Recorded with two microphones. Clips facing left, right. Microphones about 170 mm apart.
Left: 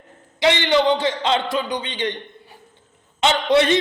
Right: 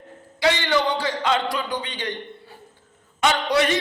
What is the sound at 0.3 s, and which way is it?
A man's voice, 20° left (ahead or behind).